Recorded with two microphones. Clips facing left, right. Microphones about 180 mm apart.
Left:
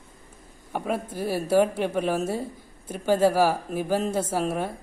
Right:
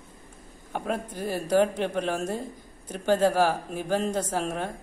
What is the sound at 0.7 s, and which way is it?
A woman's voice, 10° left (ahead or behind).